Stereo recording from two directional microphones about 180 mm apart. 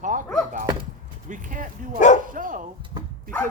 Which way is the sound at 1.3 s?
50° right (ahead or behind).